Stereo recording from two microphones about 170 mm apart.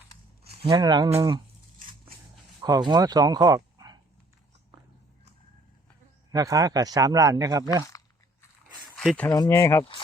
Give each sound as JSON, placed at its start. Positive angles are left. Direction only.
{"t": 0.7, "sound": "a man's voice", "side_deg": -25}
{"t": 2.6, "sound": "speech", "side_deg": -20}
{"t": 6.3, "sound": "a man's voice", "side_deg": -20}
{"t": 7.9, "sound": "biting", "side_deg": 20}
{"t": 9.0, "sound": "speech", "side_deg": 5}
{"t": 9.3, "sound": "speech", "side_deg": 20}